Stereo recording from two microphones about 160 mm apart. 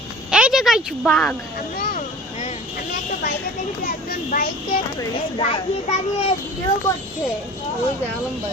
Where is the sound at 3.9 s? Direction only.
65° left (ahead or behind).